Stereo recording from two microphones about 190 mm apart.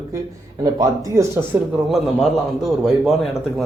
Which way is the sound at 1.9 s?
Centre (ahead or behind).